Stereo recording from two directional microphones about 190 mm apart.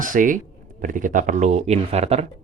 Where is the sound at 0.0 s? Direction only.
45° right (ahead or behind).